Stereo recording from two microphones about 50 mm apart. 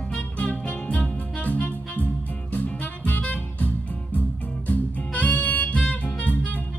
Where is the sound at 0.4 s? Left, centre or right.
Left.